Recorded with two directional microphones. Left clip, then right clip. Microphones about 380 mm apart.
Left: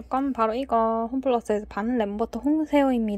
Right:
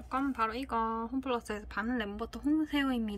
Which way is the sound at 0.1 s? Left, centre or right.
Centre.